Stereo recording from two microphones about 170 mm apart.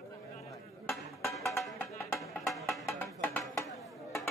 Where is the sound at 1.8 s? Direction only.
15° left (ahead or behind).